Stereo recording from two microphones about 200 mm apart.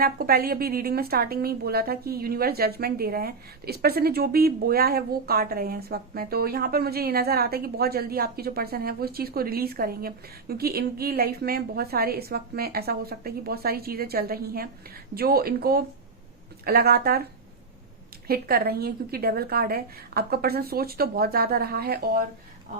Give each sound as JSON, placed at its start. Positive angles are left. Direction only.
{"t": 0.0, "sound": "a woman's voice", "side_deg": -50}
{"t": 18.3, "sound": "a woman's voice", "side_deg": -50}